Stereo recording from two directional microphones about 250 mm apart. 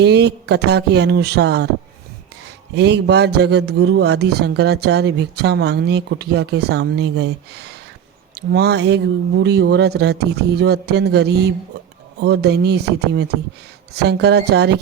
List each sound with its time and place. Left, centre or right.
0.0 s speech: right
2.7 s a man's voice: right